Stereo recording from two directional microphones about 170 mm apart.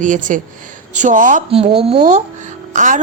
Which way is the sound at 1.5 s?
35° right (ahead or behind).